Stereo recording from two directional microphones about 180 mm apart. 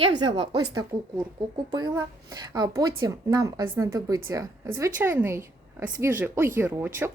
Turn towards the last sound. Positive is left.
turn(degrees=-15)  # may be behind; listen again after turning